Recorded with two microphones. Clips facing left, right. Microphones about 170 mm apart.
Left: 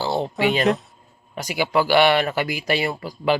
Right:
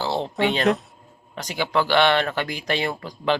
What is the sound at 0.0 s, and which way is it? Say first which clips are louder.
Speech: left 1 dB; 5° left (ahead or behind).